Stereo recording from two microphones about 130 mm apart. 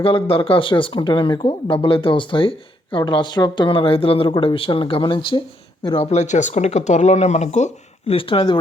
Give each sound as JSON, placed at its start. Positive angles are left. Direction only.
{"t": 0.0, "sound": "speech", "side_deg": 45}
{"t": 6.1, "sound": "speech", "side_deg": 65}
{"t": 8.1, "sound": "speech", "side_deg": 45}